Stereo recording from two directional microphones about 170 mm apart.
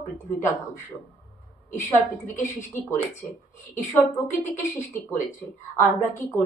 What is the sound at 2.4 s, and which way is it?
Speech, 45° left (ahead or behind).